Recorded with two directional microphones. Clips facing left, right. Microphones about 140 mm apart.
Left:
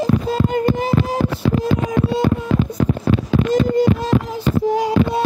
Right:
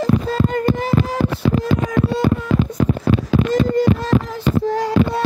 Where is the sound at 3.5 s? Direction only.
15° left (ahead or behind).